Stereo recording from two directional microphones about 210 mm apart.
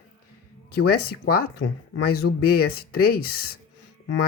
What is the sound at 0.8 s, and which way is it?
Speech, 45° left (ahead or behind).